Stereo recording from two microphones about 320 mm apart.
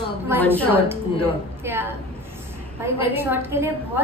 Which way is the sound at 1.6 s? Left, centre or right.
Centre.